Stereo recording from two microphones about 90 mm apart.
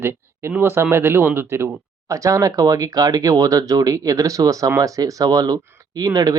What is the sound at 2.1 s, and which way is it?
Speech, 35° right (ahead or behind).